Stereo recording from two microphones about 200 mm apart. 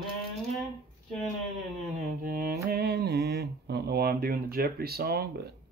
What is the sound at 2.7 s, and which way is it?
Speech, 50° right (ahead or behind).